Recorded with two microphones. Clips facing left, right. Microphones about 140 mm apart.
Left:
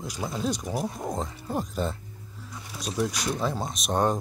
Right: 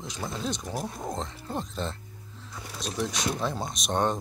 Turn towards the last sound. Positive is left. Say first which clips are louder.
# left 2 dB
turn(degrees=5)  # may be behind; listen again after turning